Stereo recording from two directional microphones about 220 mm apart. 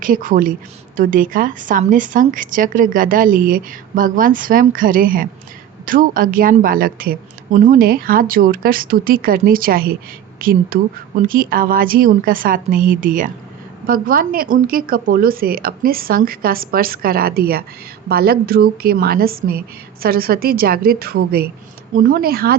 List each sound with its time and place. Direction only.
0.0 s a woman's voice: 40° right (ahead or behind)